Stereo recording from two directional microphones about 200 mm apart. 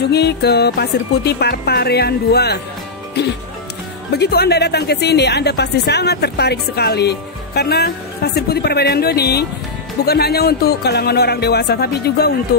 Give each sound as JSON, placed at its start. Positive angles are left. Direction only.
{"t": 0.0, "sound": "a woman's voice", "side_deg": 55}